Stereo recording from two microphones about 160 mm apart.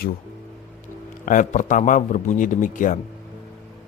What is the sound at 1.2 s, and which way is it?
A man's voice, 55° left (ahead or behind).